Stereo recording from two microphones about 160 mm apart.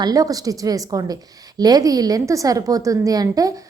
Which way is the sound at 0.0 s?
25° right (ahead or behind).